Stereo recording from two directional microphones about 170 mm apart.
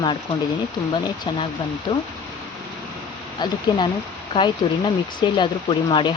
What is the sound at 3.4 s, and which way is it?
Speech, 25° left (ahead or behind).